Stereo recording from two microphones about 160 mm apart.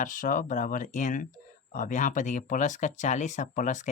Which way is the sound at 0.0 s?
55° left (ahead or behind).